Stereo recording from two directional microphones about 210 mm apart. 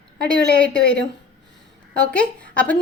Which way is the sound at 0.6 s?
5° left (ahead or behind).